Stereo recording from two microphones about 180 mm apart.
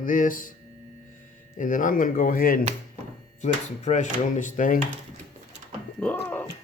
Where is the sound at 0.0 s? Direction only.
50° left (ahead or behind).